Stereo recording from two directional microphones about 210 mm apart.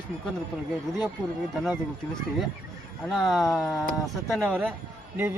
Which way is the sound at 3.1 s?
Centre (ahead or behind).